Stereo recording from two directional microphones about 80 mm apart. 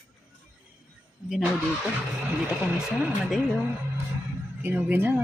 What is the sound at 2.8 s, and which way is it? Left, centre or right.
Speech, centre.